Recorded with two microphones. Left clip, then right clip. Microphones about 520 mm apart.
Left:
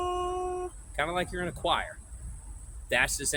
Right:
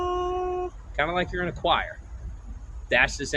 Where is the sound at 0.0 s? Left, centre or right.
Left.